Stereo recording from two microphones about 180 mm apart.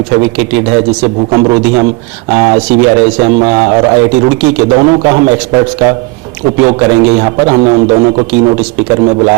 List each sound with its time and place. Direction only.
1.0 s a man's voice: 25° right (ahead or behind)